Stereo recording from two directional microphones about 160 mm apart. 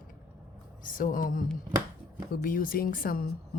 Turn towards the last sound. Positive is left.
turn(degrees=65)  # may be behind; listen again after turning